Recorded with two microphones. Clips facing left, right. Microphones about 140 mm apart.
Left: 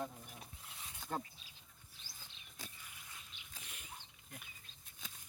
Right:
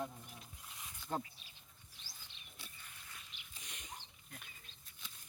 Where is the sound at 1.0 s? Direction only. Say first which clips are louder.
Right 1 dB; 45° left (ahead or behind).